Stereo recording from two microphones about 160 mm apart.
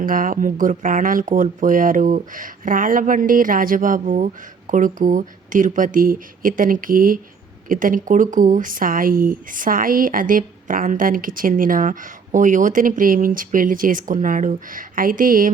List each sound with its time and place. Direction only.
0.0 s speech: 60° right (ahead or behind)